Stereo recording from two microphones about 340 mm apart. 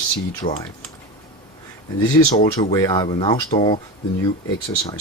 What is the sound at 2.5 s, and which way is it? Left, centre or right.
Speech, centre.